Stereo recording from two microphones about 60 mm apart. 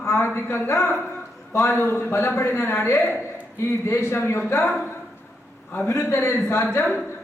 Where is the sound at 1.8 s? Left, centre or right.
Left.